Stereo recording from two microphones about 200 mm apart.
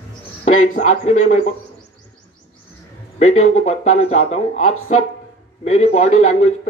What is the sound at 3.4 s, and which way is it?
A man's voice, 35° left (ahead or behind).